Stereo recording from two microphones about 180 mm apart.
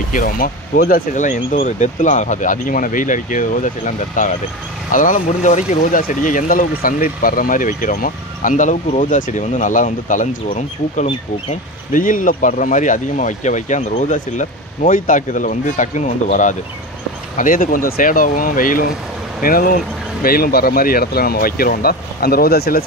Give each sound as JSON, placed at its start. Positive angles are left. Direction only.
{"t": 0.1, "sound": "speech", "side_deg": 50}